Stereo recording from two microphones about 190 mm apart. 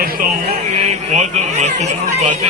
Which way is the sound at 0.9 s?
35° right (ahead or behind).